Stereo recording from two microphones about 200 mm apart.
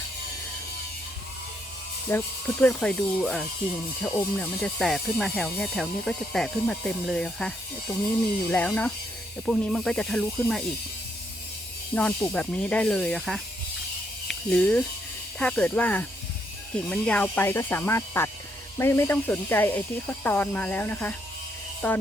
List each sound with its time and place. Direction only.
2.0 s speech: 10° left (ahead or behind)
11.9 s speech: 5° left (ahead or behind)